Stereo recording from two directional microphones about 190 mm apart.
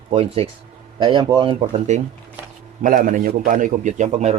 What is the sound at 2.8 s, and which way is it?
A man's voice, 45° right (ahead or behind).